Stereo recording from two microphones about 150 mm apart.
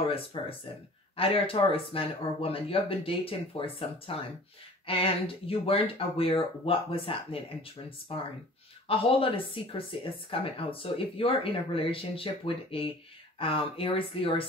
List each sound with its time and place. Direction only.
0.1 s speech: 40° left (ahead or behind)